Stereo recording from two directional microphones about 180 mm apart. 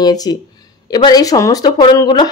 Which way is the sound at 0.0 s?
20° left (ahead or behind).